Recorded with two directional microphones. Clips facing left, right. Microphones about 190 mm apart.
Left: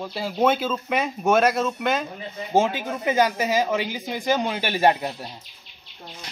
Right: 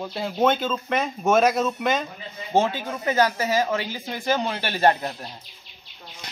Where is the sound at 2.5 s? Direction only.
15° left (ahead or behind).